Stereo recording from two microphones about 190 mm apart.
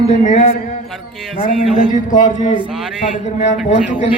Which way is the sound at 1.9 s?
40° left (ahead or behind).